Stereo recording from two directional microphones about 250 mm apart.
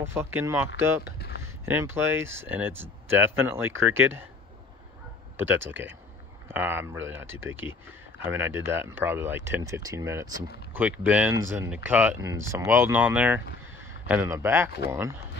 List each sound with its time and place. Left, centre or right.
0.0 s speech: centre
1.1 s a sound: left
1.7 s speech: centre
5.5 s speech: centre